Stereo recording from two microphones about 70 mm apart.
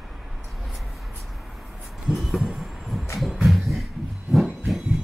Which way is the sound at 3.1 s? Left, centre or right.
Centre.